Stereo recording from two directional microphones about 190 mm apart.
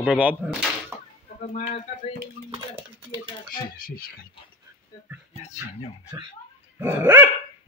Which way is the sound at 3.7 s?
50° left (ahead or behind).